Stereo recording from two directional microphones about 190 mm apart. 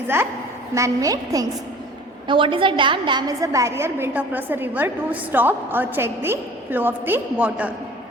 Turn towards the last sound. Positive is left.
turn(degrees=-10)  # may be behind; listen again after turning